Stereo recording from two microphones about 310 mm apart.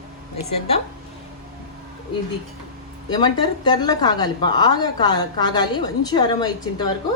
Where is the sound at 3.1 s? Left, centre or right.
Centre.